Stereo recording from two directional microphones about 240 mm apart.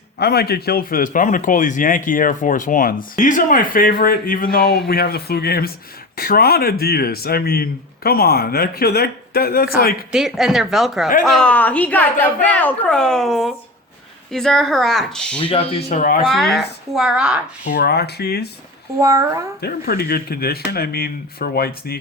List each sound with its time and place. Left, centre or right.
0.2 s a man's voice: left
10.1 s a woman's voice: centre
15.4 s speech: left
16.0 s a man's voice: left
16.2 s a woman's voice: centre
17.7 s a man's voice: left
18.9 s speech: centre
19.6 s a man's voice: left